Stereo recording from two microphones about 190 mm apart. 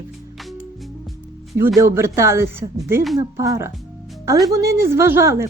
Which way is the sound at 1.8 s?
15° right (ahead or behind).